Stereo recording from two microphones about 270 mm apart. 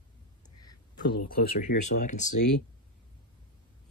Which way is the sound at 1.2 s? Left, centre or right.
Left.